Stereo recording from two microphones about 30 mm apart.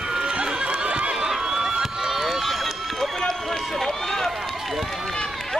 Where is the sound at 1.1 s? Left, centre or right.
Centre.